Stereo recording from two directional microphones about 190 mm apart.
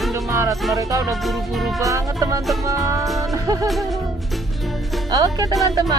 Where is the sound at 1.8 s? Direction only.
15° right (ahead or behind).